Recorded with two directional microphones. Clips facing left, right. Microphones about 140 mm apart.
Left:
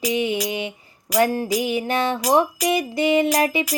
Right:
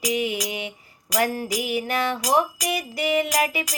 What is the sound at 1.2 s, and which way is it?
Music, 25° left (ahead or behind).